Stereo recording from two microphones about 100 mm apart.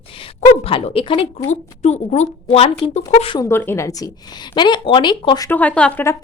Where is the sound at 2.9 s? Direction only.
70° left (ahead or behind).